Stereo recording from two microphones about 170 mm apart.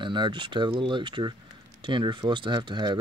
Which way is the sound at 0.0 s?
25° right (ahead or behind).